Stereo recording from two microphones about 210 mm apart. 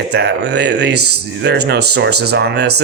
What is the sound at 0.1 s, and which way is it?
Speech, 55° right (ahead or behind).